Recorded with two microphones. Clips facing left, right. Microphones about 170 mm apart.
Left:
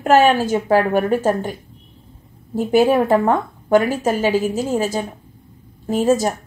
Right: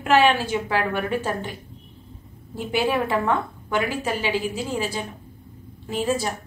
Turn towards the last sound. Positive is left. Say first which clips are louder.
# left 8 dB
turn(degrees=45)  # may be behind; listen again after turning